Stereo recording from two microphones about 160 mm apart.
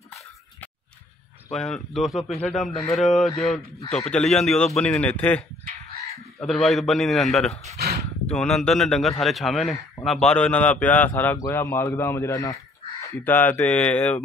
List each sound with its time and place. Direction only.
1.5 s a man's voice: 5° left (ahead or behind)
6.4 s a man's voice: centre (ahead or behind)
7.7 s a sound: 75° right (ahead or behind)
8.3 s a man's voice: 5° left (ahead or behind)